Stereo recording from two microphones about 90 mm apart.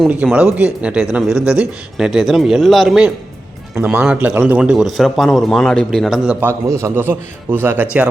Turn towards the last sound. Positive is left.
turn(degrees=-25)  # may be behind; listen again after turning